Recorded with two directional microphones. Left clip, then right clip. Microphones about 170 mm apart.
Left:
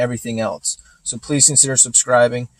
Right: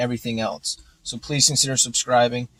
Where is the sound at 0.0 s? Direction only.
65° left (ahead or behind).